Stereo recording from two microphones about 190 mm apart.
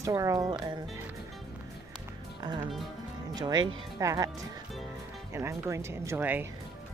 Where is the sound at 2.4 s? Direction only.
20° right (ahead or behind).